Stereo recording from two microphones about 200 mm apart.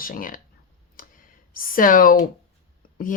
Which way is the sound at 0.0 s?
45° left (ahead or behind).